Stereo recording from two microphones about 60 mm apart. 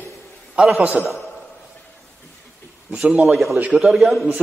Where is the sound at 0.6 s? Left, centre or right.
Centre.